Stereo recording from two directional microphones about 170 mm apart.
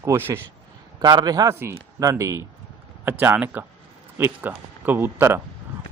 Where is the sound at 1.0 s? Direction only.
25° right (ahead or behind).